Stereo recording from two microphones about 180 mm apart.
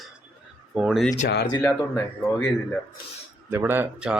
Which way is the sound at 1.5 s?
15° left (ahead or behind).